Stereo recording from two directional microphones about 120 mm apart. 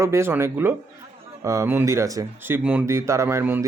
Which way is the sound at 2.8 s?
25° right (ahead or behind).